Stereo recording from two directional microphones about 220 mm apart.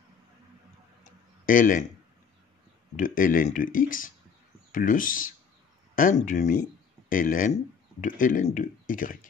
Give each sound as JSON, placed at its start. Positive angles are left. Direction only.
{"t": 1.4, "sound": "speech", "side_deg": 40}
{"t": 3.0, "sound": "speech", "side_deg": 40}